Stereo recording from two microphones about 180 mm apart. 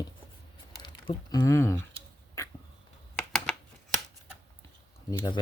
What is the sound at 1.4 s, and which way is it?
Speech, 15° left (ahead or behind).